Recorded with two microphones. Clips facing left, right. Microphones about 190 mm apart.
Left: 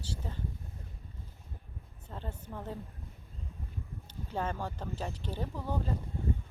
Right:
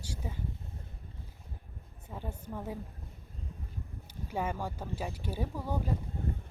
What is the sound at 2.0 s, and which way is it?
Speech, 10° right (ahead or behind).